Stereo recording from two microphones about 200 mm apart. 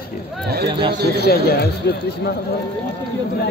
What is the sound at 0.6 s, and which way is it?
Speech, 25° right (ahead or behind).